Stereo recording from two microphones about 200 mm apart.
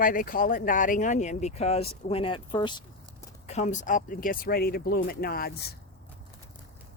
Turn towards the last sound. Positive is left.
turn(degrees=50)  # may be behind; listen again after turning